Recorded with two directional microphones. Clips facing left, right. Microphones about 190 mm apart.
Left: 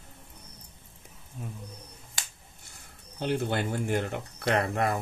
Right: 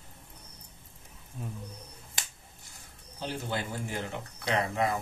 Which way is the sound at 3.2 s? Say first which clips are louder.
Left 6 dB; 60° left (ahead or behind).